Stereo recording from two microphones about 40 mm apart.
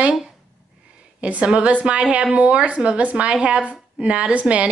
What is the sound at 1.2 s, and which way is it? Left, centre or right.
A woman's voice, right.